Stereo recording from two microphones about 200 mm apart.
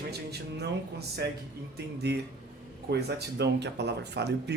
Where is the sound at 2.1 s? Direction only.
55° right (ahead or behind).